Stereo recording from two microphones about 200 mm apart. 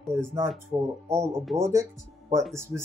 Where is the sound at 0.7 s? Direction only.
25° right (ahead or behind).